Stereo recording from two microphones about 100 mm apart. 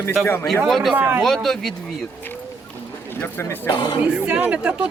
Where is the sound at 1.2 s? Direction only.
5° left (ahead or behind).